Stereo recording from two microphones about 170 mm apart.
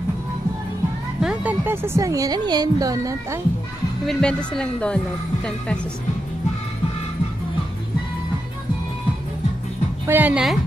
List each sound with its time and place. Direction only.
1.2 s speech: 5° right (ahead or behind)
4.0 s speech: 5° left (ahead or behind)
10.0 s a woman's voice: 10° right (ahead or behind)